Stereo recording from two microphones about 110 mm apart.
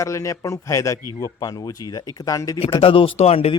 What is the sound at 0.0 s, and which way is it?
A man's voice, 30° left (ahead or behind).